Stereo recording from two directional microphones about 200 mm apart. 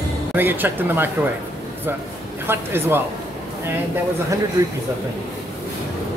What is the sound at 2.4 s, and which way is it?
Speech, 10° right (ahead or behind).